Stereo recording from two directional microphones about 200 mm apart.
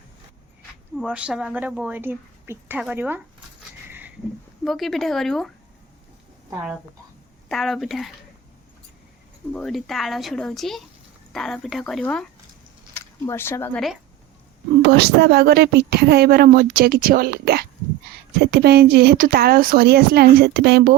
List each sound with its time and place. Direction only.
1.0 s a woman's voice: 5° right (ahead or behind)
3.8 s a sound: 10° right (ahead or behind)
4.6 s speech: centre (ahead or behind)
7.4 s speech: centre (ahead or behind)
9.5 s speech: 5° left (ahead or behind)
14.8 s a woman's voice: 55° right (ahead or behind)